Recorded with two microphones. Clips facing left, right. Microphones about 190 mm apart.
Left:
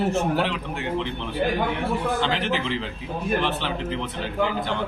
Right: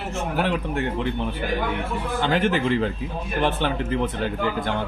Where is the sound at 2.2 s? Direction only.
50° right (ahead or behind).